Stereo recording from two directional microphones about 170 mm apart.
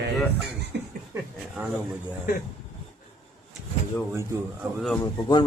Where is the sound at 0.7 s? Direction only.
75° right (ahead or behind).